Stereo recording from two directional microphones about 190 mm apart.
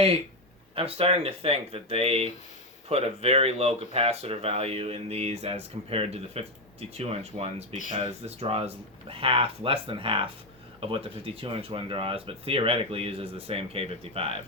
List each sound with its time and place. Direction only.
0.8 s speech: 30° right (ahead or behind)